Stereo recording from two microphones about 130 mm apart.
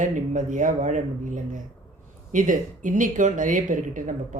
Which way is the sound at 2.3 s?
85° right.